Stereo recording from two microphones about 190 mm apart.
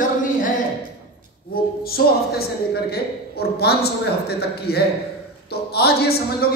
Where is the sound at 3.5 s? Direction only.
55° left (ahead or behind).